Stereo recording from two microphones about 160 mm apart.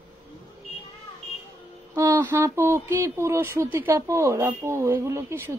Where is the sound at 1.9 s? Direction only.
20° right (ahead or behind).